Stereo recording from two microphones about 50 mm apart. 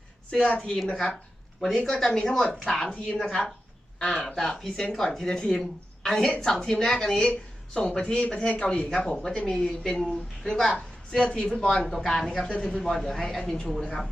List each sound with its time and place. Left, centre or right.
0.3 s a woman's voice: centre
12.5 s speech: centre